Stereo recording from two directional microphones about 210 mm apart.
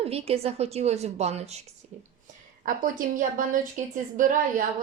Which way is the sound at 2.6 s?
40° right (ahead or behind).